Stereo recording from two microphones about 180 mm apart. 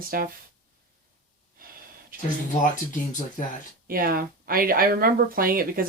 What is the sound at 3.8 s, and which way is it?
Speech, 55° right (ahead or behind).